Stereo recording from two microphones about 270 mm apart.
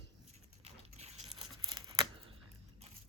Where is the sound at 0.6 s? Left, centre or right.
Right.